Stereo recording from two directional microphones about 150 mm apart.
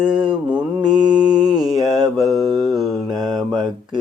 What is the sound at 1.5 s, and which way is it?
Mantra, 25° right (ahead or behind).